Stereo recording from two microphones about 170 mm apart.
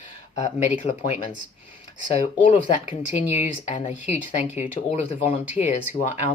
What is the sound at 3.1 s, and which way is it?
Speech, 45° left (ahead or behind).